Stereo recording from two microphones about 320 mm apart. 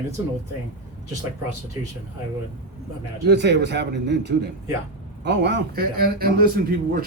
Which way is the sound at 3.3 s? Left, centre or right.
Right.